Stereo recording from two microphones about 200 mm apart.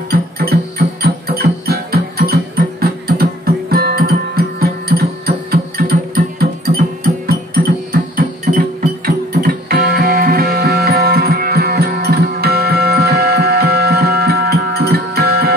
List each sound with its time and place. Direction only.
0.1 s music: 50° right (ahead or behind)